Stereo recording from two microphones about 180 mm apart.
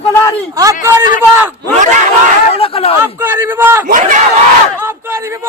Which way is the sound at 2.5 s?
30° left (ahead or behind).